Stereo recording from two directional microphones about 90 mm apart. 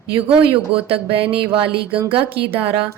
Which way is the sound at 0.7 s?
90° right.